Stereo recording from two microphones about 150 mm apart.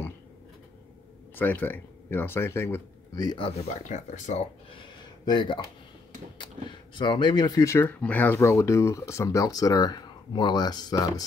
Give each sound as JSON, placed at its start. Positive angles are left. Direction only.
{"t": 1.3, "sound": "speech", "side_deg": 10}
{"t": 3.3, "sound": "speech", "side_deg": 35}
{"t": 4.7, "sound": "a sound", "side_deg": 30}
{"t": 6.3, "sound": "speech", "side_deg": 30}